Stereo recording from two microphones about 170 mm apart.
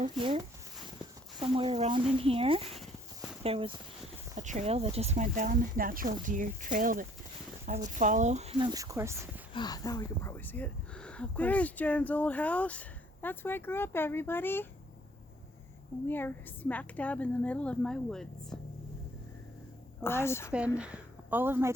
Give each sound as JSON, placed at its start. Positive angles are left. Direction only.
{"t": 0.0, "sound": "speech", "side_deg": -30}
{"t": 4.4, "sound": "speech", "side_deg": -45}
{"t": 8.5, "sound": "speech", "side_deg": -25}
{"t": 9.5, "sound": "speech", "side_deg": 25}
{"t": 16.0, "sound": "speech", "side_deg": 10}
{"t": 20.1, "sound": "speech", "side_deg": 15}
{"t": 20.7, "sound": "speech", "side_deg": -5}